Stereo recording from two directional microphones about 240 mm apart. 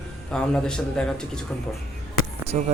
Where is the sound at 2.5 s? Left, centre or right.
Right.